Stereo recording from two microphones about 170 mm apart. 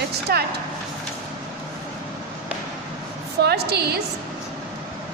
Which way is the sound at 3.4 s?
75° right (ahead or behind).